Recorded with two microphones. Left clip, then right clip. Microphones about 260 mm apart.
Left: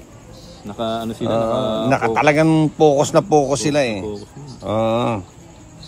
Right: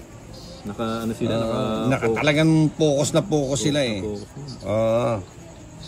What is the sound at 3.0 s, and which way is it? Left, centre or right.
A man's voice, centre.